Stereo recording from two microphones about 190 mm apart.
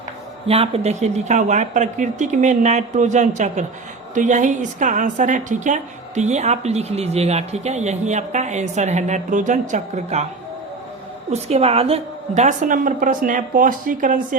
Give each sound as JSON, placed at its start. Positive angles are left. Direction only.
{"t": 0.4, "sound": "a woman's voice", "side_deg": -30}
{"t": 11.3, "sound": "a woman's voice", "side_deg": -35}